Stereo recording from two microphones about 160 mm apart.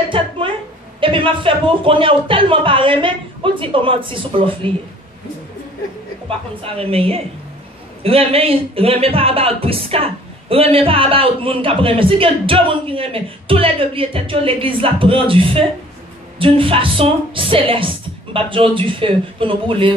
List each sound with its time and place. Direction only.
0.1 s a sound: 30° right (ahead or behind)
1.0 s speech: 35° right (ahead or behind)
6.6 s speech: 35° right (ahead or behind)